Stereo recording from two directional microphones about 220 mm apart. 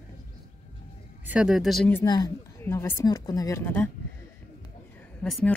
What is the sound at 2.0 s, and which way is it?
Speech, 20° left (ahead or behind).